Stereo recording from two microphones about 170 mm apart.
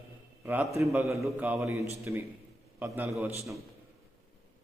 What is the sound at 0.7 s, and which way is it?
A man's voice, 15° right (ahead or behind).